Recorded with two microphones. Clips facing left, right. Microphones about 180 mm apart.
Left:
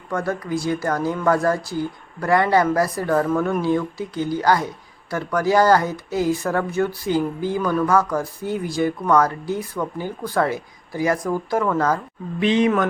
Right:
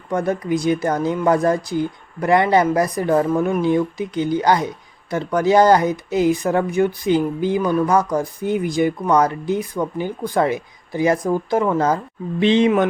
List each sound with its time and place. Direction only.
0.1 s speech: 20° right (ahead or behind)